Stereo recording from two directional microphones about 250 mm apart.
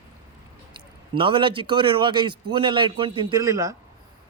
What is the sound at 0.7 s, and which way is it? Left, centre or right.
A man's voice, centre.